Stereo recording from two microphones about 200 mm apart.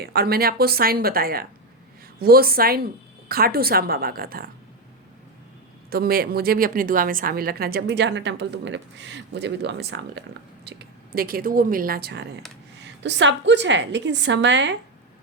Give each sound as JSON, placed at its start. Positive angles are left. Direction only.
{"t": 0.0, "sound": "a woman's voice", "side_deg": -50}
{"t": 5.9, "sound": "a woman's voice", "side_deg": -50}